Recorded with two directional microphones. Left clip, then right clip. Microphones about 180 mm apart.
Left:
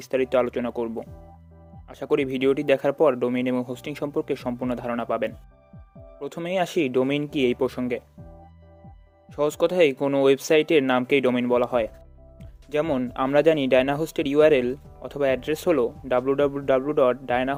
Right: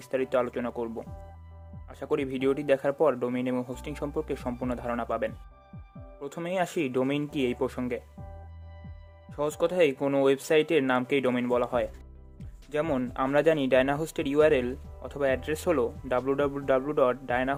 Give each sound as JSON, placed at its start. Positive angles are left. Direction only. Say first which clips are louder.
{"t": 0.0, "sound": "speech", "louder": "left 5 dB", "side_deg": 35}
{"t": 9.3, "sound": "speech", "louder": "left 5 dB", "side_deg": 35}